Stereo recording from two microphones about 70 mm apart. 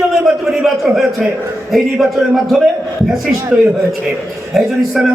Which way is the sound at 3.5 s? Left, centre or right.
Centre.